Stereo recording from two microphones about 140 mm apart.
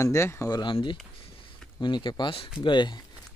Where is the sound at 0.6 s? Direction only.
35° left (ahead or behind).